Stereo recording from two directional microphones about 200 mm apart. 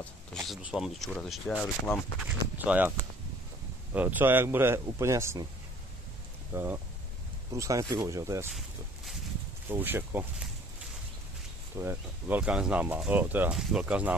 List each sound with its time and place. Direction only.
0.0 s speech: centre (ahead or behind)
3.9 s speech: 10° right (ahead or behind)
6.5 s speech: 10° right (ahead or behind)
9.7 s speech: 10° right (ahead or behind)
11.7 s speech: 10° right (ahead or behind)